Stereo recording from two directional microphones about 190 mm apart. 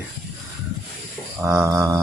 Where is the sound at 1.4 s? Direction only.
15° right (ahead or behind).